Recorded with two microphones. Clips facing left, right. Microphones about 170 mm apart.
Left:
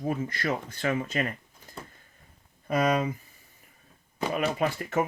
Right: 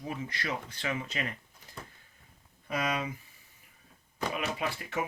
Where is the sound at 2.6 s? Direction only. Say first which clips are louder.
Left 8 dB; 45° left (ahead or behind).